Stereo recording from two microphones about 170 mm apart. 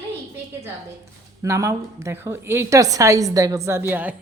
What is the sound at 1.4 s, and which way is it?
A woman's voice, 20° right (ahead or behind).